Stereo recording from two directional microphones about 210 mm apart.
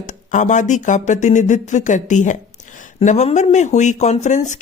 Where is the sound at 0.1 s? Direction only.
35° left (ahead or behind).